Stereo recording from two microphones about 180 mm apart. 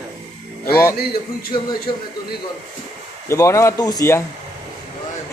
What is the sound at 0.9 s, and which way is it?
Speech, 55° left (ahead or behind).